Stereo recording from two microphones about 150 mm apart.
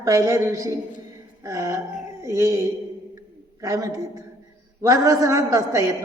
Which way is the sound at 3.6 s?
25° right (ahead or behind).